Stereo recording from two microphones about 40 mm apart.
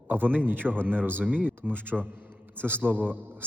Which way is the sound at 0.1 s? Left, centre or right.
Right.